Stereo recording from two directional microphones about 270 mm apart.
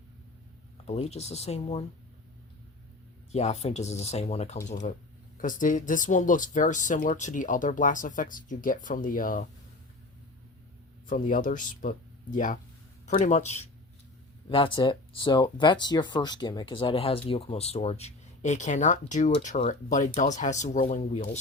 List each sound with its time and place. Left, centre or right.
0.9 s speech: left
3.3 s speech: left
11.0 s speech: left